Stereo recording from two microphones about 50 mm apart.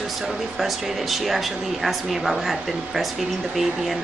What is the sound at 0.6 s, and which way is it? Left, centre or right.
Speech, centre.